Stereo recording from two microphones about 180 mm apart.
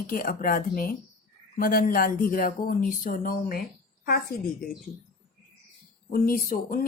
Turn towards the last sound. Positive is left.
turn(degrees=50)  # may be behind; listen again after turning